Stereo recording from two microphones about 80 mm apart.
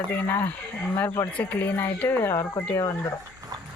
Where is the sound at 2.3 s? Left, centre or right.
Left.